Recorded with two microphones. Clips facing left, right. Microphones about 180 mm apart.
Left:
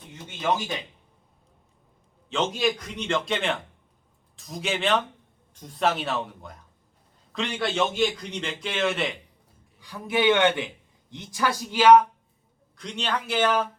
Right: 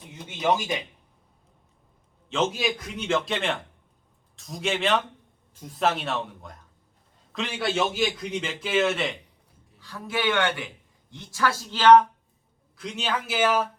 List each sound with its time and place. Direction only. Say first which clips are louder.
0.3 s speech: right 2 dB; 10° right (ahead or behind)
2.3 s a man's voice: even; centre (ahead or behind)
9.8 s a man's voice: left 5 dB; 15° left (ahead or behind)
12.7 s a man's voice: even; 5° right (ahead or behind)